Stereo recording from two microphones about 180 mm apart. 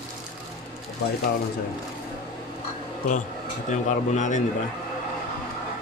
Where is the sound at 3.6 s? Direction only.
40° left (ahead or behind).